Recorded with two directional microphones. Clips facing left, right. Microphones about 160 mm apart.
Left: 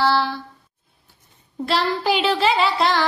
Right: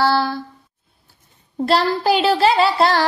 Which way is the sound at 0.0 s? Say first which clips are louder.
Right 2 dB; 40° right (ahead or behind).